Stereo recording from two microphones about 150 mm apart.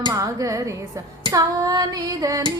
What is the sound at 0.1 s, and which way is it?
Music, 20° right (ahead or behind).